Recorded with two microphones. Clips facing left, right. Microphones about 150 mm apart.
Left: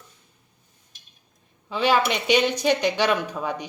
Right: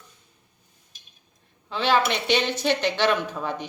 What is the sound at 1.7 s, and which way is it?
A woman's voice, 10° left (ahead or behind).